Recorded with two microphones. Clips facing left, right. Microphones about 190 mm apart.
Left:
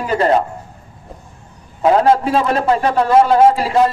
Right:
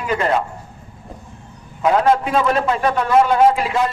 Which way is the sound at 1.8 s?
35° left (ahead or behind).